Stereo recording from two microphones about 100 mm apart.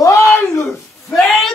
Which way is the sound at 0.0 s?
35° left (ahead or behind).